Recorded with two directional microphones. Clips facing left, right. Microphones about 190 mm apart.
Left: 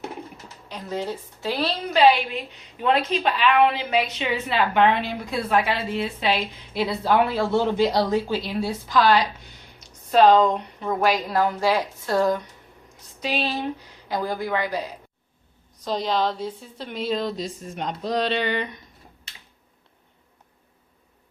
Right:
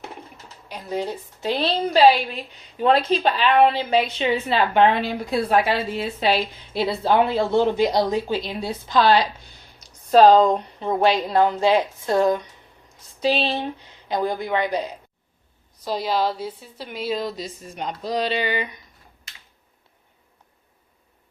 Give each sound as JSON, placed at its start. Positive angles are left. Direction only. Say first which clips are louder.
{"t": 0.7, "sound": "a woman's voice", "louder": "right 2 dB", "side_deg": -15}
{"t": 6.7, "sound": "speech", "louder": "right 2 dB", "side_deg": -25}
{"t": 15.8, "sound": "a woman's voice", "louder": "right 1 dB", "side_deg": -5}